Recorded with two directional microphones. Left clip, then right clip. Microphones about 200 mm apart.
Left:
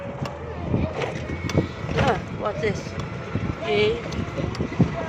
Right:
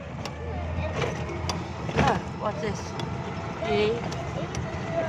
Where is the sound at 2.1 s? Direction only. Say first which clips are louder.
Left 3 dB; 5° left (ahead or behind).